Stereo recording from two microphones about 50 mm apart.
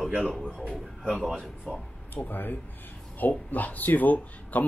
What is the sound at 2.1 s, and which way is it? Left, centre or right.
Speech, left.